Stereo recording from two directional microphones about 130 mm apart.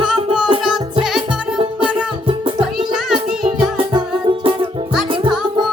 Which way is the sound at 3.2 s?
40° right (ahead or behind).